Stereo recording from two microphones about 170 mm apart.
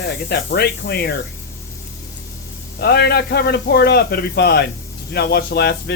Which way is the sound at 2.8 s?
70° left (ahead or behind).